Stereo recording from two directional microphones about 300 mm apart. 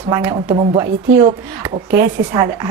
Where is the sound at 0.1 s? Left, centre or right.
Centre.